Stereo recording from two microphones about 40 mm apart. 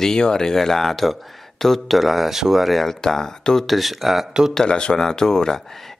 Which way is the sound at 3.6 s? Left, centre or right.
Centre.